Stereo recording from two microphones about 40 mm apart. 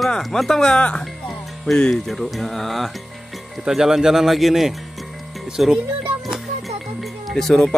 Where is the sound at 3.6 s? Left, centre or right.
Centre.